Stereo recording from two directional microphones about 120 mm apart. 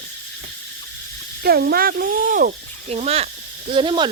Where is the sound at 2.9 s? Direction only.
60° right (ahead or behind).